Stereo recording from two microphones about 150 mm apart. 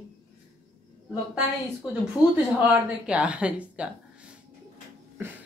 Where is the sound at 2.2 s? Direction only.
10° right (ahead or behind).